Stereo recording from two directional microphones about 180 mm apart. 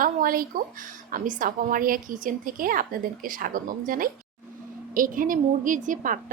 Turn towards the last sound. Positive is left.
turn(degrees=-45)  # may be behind; listen again after turning